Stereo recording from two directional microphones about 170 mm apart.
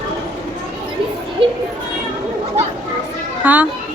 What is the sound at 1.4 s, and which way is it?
Children playing, 30° right (ahead or behind).